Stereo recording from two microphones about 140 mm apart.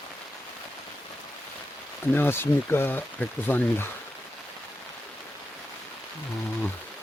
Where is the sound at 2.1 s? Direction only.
15° left (ahead or behind).